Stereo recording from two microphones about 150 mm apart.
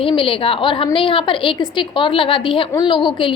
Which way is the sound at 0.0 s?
35° left (ahead or behind).